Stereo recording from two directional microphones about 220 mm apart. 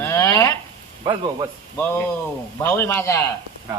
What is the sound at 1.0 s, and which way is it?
Speech, 20° right (ahead or behind).